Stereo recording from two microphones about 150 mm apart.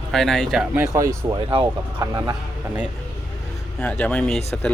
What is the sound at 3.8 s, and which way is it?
Speech, 10° left (ahead or behind).